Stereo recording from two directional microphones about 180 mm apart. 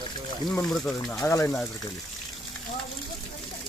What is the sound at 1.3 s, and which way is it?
Speech, 15° left (ahead or behind).